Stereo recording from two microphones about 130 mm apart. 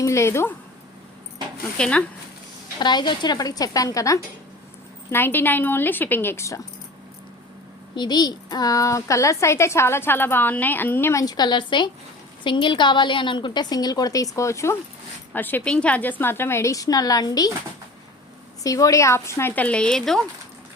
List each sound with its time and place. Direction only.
0.0 s a woman's voice: 20° left (ahead or behind)
1.8 s a woman's voice: 10° left (ahead or behind)
2.7 s a woman's voice: 35° left (ahead or behind)
7.9 s a woman's voice: 35° left (ahead or behind)
18.6 s a woman's voice: 25° left (ahead or behind); by 20.2 s 5° left (ahead or behind)